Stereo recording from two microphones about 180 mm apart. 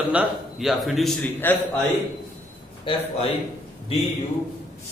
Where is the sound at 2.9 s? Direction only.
30° left (ahead or behind).